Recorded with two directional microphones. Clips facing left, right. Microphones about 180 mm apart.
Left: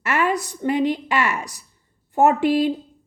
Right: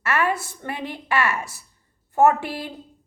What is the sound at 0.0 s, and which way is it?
A woman's voice, 15° left (ahead or behind).